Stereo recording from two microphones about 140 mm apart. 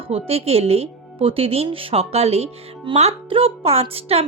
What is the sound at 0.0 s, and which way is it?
Speech, 45° right (ahead or behind).